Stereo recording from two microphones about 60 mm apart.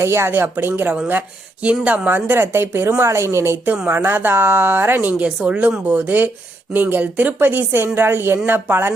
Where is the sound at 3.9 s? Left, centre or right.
Right.